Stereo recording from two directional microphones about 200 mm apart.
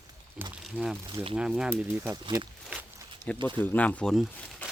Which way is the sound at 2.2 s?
25° right (ahead or behind).